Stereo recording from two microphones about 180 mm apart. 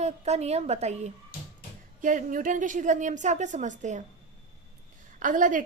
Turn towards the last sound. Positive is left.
turn(degrees=-45)  # may be behind; listen again after turning